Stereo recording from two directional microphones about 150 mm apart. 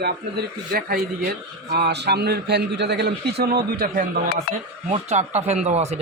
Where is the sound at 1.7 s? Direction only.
90° right; by 4.3 s 70° right (ahead or behind).